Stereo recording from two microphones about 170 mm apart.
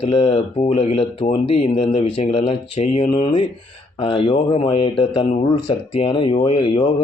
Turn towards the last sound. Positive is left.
turn(degrees=30)  # may be behind; listen again after turning